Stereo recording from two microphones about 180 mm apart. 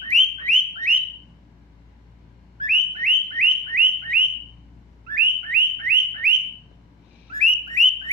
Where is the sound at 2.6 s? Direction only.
50° right (ahead or behind).